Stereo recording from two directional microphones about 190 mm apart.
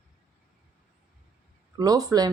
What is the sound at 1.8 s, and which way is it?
Speech, 20° right (ahead or behind).